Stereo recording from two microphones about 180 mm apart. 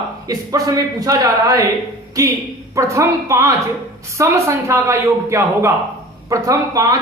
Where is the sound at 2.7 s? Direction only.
15° right (ahead or behind).